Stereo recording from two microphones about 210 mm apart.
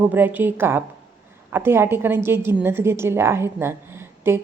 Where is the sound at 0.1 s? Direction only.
10° right (ahead or behind).